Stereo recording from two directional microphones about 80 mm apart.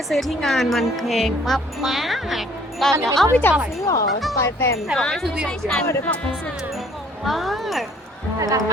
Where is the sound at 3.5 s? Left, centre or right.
Left.